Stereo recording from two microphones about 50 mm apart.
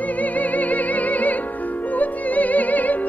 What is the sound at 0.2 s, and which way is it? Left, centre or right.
Music, left.